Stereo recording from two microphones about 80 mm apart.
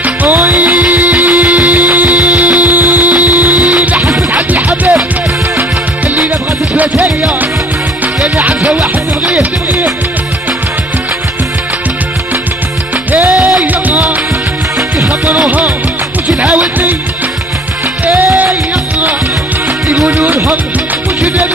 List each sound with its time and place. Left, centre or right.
0.0 s music: right
6.8 s music: centre
8.5 s music: centre
9.4 s music: right
13.1 s music: right
16.3 s music: centre
18.0 s music: centre
20.2 s speech: right